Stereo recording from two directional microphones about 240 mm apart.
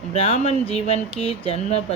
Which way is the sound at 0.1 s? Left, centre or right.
Left.